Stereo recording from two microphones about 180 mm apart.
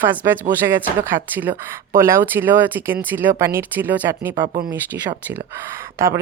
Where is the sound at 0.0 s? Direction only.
10° right (ahead or behind).